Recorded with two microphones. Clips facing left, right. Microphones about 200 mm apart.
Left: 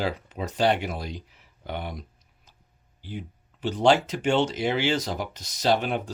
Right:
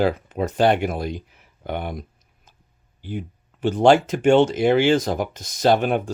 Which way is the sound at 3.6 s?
50° right (ahead or behind).